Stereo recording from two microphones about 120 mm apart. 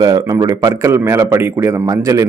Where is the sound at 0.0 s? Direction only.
30° right (ahead or behind).